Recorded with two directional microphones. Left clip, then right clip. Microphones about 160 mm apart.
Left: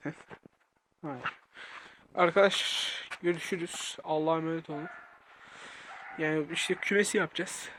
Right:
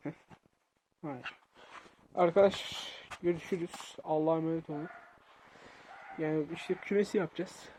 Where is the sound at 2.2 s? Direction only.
20° right (ahead or behind).